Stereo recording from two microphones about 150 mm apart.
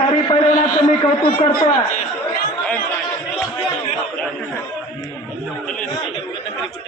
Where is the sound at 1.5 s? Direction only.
75° left (ahead or behind).